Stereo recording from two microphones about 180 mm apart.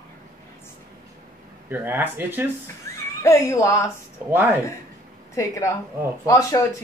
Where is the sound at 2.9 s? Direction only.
15° left (ahead or behind).